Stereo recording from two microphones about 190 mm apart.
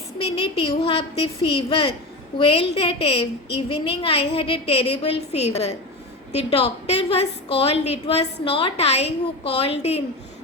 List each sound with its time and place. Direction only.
0.3 s a woman's voice: 30° left (ahead or behind)